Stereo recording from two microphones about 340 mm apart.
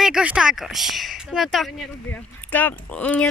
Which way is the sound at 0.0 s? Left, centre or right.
Centre.